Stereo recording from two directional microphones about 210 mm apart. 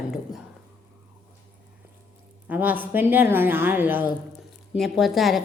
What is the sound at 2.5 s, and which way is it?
A woman's voice, 10° right (ahead or behind).